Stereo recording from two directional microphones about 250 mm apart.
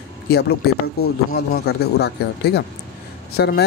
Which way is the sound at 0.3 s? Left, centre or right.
Left.